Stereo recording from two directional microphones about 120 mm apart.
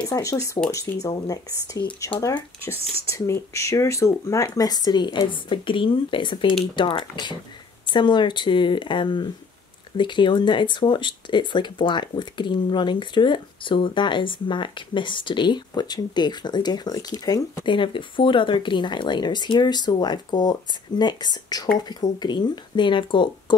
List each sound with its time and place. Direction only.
0.1 s speech: 25° left (ahead or behind)
2.3 s speech: 20° left (ahead or behind); by 23.3 s 40° left (ahead or behind)